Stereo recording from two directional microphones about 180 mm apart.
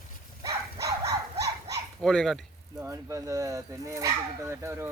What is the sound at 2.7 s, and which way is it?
Speech, 15° right (ahead or behind).